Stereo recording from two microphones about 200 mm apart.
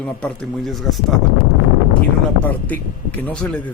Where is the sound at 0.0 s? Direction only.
5° left (ahead or behind).